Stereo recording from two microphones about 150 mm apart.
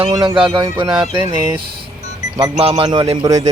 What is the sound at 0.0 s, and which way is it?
Speech, 30° right (ahead or behind).